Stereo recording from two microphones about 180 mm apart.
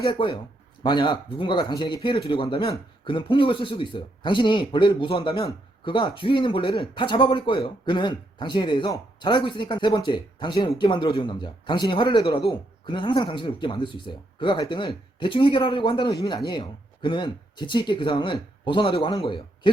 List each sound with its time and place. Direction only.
0.1 s speech: 25° left (ahead or behind)